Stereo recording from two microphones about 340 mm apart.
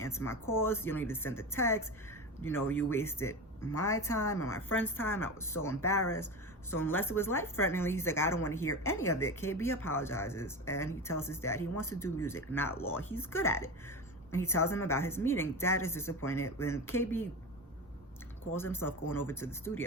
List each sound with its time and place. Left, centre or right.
0.3 s a woman's voice: centre
11.6 s speech: left
11.9 s a woman's voice: centre
18.5 s a woman's voice: centre